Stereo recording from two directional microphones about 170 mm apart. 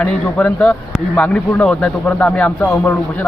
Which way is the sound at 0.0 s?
10° left (ahead or behind).